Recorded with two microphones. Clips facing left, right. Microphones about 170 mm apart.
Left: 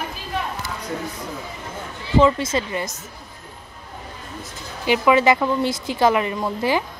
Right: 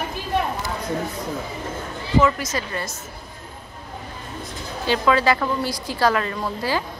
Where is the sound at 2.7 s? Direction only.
15° left (ahead or behind).